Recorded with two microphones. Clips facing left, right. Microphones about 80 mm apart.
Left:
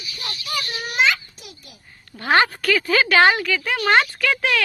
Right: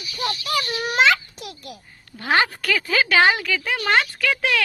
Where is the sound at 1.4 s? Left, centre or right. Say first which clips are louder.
Right 8 dB; right.